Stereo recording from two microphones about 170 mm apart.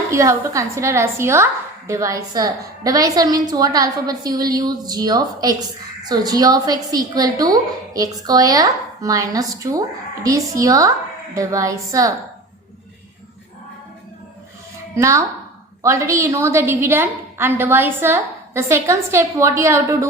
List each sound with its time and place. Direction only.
0.1 s a woman's voice: 20° right (ahead or behind)
14.9 s a woman's voice: 20° right (ahead or behind)